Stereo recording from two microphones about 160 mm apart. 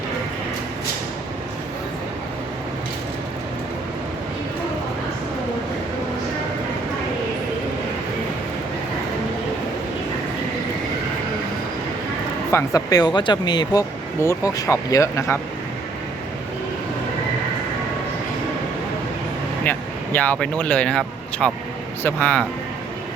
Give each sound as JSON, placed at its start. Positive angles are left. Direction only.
{"t": 12.5, "sound": "speech", "side_deg": 20}
{"t": 20.1, "sound": "speech", "side_deg": 10}